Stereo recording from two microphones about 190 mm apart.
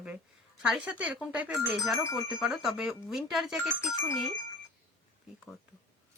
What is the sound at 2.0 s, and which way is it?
Speech, 15° left (ahead or behind).